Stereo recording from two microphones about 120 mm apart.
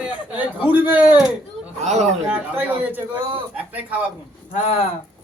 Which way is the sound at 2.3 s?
15° right (ahead or behind).